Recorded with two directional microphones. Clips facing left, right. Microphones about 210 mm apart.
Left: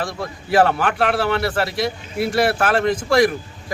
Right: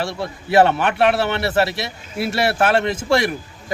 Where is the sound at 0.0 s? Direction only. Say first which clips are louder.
Right 1 dB; 25° right (ahead or behind).